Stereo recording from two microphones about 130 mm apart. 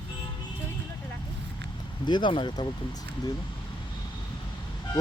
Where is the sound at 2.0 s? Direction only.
35° left (ahead or behind).